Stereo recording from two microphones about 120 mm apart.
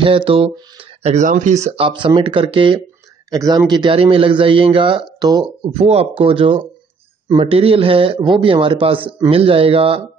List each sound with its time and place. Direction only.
0.0 s speech: 45° right (ahead or behind); by 1.7 s 85° right
1.8 s a man's voice: 45° right (ahead or behind)
3.3 s a man's voice: 30° right (ahead or behind)
5.7 s a man's voice: 60° right (ahead or behind)